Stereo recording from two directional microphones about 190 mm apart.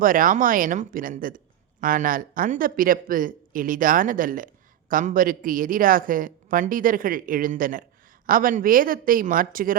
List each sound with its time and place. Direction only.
0.0 s speech: 45° right (ahead or behind)